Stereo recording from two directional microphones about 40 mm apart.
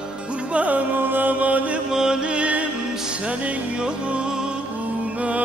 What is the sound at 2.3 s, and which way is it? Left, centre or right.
Music, right.